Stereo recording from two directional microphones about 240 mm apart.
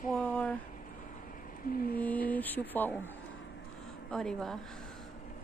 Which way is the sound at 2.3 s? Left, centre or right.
Centre.